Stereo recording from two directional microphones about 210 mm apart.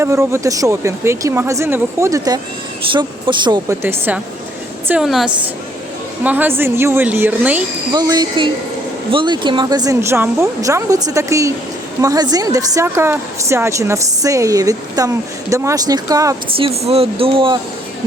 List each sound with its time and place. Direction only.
0.0 s a woman's voice: 15° right (ahead or behind)
7.9 s a woman's voice: 20° right (ahead or behind)